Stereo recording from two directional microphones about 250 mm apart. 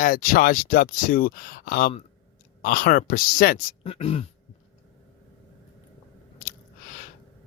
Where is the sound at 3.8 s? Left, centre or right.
Left.